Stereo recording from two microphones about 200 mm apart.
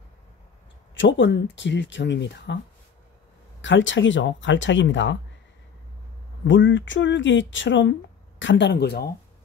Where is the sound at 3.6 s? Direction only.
70° left (ahead or behind).